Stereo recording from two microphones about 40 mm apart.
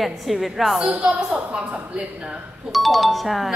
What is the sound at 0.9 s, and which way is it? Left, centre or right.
A woman's voice, right.